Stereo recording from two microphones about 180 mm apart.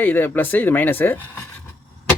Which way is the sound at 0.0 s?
10° left (ahead or behind).